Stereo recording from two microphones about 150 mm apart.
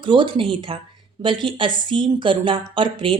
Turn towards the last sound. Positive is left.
turn(degrees=-35)  # may be behind; listen again after turning